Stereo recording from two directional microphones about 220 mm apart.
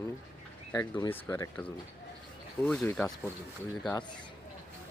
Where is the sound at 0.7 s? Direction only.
15° left (ahead or behind).